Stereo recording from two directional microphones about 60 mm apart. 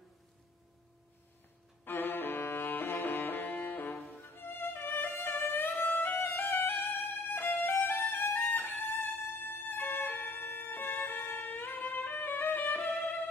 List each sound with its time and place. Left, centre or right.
1.9 s music: left
5.9 s violin: left
7.6 s music: left